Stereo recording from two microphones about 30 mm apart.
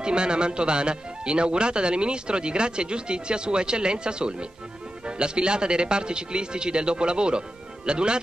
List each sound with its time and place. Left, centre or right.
0.0 s a man's voice: right